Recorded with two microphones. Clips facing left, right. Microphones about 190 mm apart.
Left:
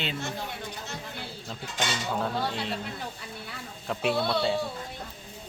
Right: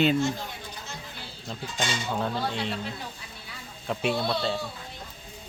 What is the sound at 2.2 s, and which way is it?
Speech, centre (ahead or behind).